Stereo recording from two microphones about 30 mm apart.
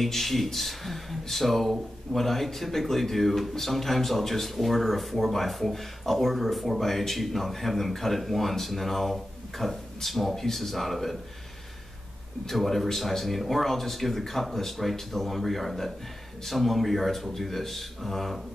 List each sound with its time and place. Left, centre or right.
0.0 s speech: centre
12.4 s speech: centre